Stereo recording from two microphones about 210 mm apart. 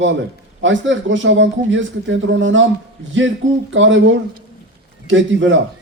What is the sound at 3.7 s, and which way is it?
A man's voice, 65° right (ahead or behind).